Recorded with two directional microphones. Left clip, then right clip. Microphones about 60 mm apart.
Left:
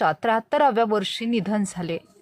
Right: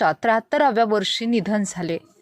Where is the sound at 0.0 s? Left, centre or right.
Right.